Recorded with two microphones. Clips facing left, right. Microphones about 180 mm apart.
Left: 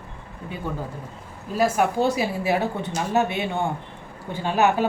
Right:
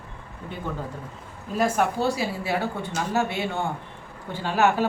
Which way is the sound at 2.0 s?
20° left (ahead or behind).